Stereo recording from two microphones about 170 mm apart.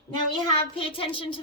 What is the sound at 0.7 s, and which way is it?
Child singing, 30° left (ahead or behind).